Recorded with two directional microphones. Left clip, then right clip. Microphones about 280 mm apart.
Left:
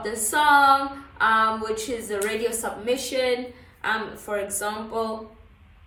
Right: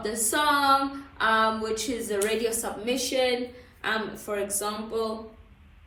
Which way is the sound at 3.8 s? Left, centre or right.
Centre.